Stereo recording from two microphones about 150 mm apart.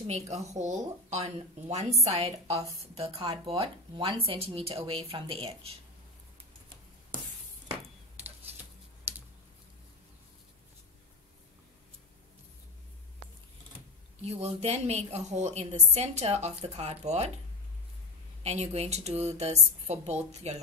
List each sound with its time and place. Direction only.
0.0 s a woman's voice: 45° right (ahead or behind)
9.1 s typing: 15° right (ahead or behind)
14.2 s a woman's voice: 45° right (ahead or behind)
18.4 s a woman's voice: 45° right (ahead or behind)